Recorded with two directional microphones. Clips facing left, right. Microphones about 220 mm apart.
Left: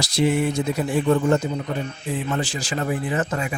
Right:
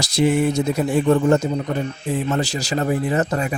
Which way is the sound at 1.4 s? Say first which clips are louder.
Right 4 dB; 50° right (ahead or behind).